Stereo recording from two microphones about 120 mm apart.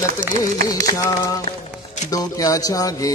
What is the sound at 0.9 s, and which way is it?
Music, 30° left (ahead or behind).